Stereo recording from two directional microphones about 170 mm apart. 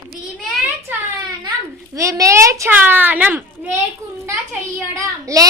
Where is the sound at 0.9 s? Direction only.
10° right (ahead or behind).